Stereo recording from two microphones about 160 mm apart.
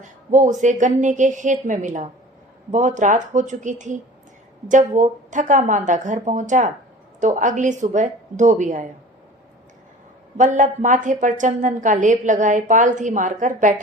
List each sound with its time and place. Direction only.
0.0 s a woman's voice: 50° right (ahead or behind)
10.3 s a woman's voice: 50° right (ahead or behind)